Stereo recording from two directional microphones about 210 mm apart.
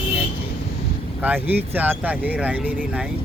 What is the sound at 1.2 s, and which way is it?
Speech, 10° right (ahead or behind).